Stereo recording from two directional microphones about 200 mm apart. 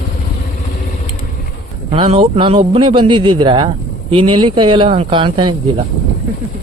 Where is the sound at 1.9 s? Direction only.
25° right (ahead or behind).